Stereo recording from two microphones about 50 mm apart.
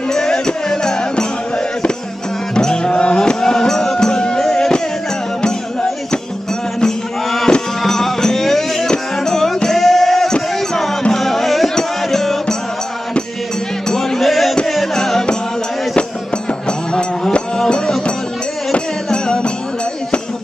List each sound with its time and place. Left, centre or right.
0.1 s music: centre
2.5 s music: centre
7.2 s music: centre
13.8 s music: centre
16.6 s music: centre